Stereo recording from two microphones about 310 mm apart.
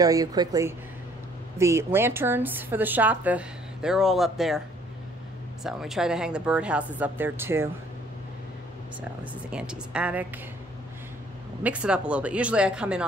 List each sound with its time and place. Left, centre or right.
0.0 s a woman's voice: centre
5.6 s a woman's voice: centre
9.2 s a woman's voice: centre
11.6 s a woman's voice: centre